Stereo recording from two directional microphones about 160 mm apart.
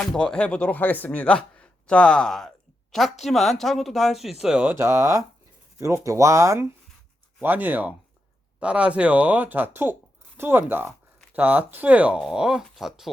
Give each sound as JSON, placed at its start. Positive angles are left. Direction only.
{"t": 0.0, "sound": "speech", "side_deg": 5}
{"t": 4.7, "sound": "speech", "side_deg": -15}